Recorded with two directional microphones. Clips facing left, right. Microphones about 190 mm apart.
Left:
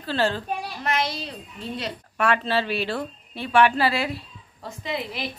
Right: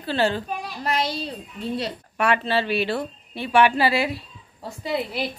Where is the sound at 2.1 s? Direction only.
5° right (ahead or behind).